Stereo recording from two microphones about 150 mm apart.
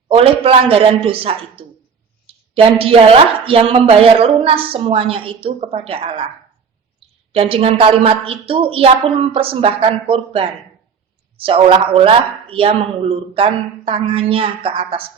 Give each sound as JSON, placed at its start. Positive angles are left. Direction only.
{"t": 0.1, "sound": "a woman's voice", "side_deg": -40}
{"t": 7.3, "sound": "a woman's voice", "side_deg": -40}